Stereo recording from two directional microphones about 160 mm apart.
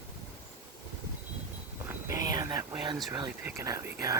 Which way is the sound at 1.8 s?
20° right (ahead or behind).